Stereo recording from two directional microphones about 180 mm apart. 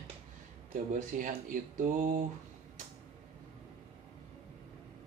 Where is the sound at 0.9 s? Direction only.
45° right (ahead or behind).